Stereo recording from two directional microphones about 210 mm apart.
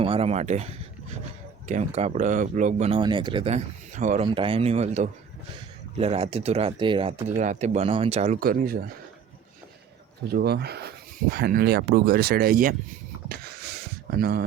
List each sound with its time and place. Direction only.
0.0 s speech: 25° right (ahead or behind)
4.2 s speech: 25° right (ahead or behind)
8.4 s speech: 45° right (ahead or behind)
10.3 s speech: 50° right (ahead or behind)
13.2 s a sound: 45° right (ahead or behind)